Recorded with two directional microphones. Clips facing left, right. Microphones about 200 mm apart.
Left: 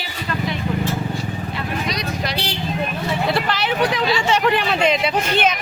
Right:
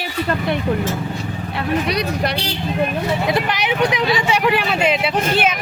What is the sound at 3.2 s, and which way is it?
Speech, 15° right (ahead or behind).